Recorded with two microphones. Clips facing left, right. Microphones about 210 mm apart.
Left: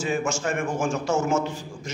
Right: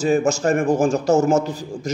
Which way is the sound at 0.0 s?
40° right (ahead or behind).